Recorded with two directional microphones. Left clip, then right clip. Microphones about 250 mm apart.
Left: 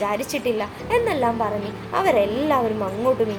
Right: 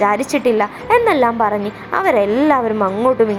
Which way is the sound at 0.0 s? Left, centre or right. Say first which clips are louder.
Right 8 dB; centre.